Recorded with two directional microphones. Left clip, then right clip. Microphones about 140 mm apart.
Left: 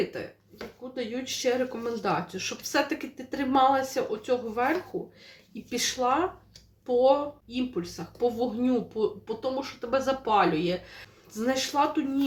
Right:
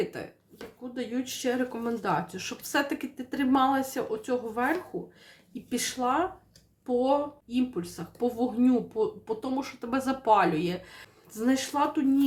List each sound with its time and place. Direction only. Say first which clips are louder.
0.9 s a woman's voice: left 1 dB; 25° right (ahead or behind)
5.7 s a woman's voice: left 2 dB; 25° right (ahead or behind)
11.3 s a woman's voice: left 1 dB; 25° right (ahead or behind)